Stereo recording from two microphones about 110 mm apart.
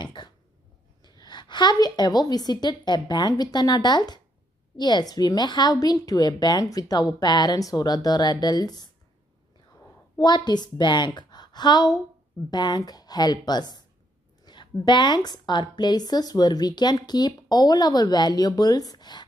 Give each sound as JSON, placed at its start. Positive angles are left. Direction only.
{"t": 0.0, "sound": "cough", "side_deg": 45}
{"t": 1.0, "sound": "a woman's voice", "side_deg": 40}
{"t": 10.1, "sound": "a woman's voice", "side_deg": 40}